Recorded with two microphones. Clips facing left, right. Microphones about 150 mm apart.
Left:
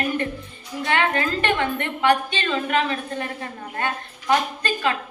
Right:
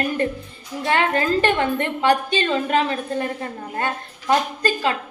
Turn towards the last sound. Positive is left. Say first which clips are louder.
# right 2 dB
turn(degrees=-30)  # may be behind; listen again after turning